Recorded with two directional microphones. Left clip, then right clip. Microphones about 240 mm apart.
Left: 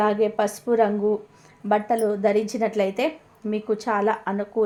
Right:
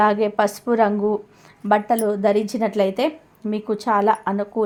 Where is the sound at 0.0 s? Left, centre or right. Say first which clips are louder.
Right 4 dB; right.